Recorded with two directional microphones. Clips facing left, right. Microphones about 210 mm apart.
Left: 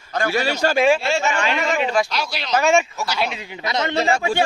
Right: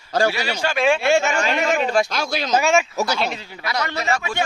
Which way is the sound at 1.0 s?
50° right (ahead or behind).